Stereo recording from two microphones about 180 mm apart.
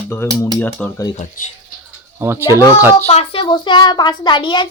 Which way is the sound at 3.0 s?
30° left (ahead or behind).